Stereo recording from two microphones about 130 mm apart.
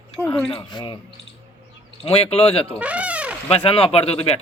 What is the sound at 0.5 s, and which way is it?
Speech, 35° left (ahead or behind).